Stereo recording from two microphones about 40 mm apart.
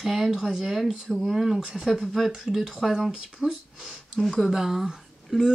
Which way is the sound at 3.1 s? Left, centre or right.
Right.